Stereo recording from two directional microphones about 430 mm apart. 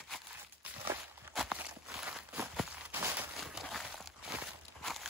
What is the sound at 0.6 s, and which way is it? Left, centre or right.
Walk, centre.